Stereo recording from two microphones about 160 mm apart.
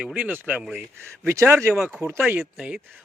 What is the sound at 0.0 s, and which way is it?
Speech, 10° right (ahead or behind).